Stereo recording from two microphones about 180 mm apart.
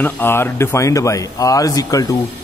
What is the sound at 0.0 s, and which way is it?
A man's voice, 10° left (ahead or behind).